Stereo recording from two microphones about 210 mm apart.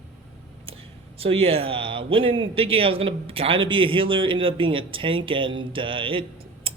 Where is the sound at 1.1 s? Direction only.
25° right (ahead or behind).